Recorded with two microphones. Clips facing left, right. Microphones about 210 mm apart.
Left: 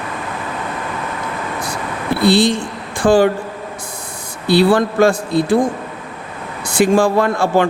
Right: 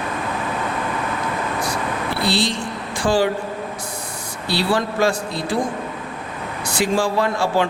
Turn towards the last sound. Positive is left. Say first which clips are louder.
# left 5 dB
turn(degrees=55)  # may be behind; listen again after turning